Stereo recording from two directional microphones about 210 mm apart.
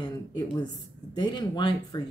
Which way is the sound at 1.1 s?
20° left (ahead or behind).